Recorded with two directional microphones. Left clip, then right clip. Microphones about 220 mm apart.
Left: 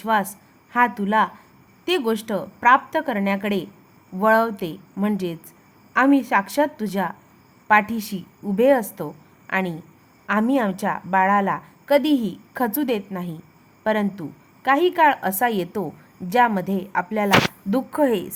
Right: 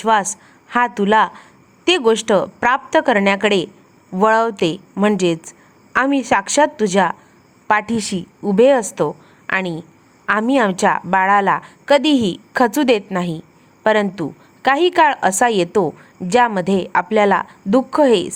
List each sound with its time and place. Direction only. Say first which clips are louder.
0.0 s a woman's voice: right 6 dB; 15° right (ahead or behind)